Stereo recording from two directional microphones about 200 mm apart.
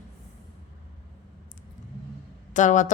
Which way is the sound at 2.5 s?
40° left (ahead or behind).